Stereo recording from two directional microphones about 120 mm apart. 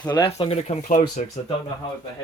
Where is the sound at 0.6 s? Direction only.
80° left.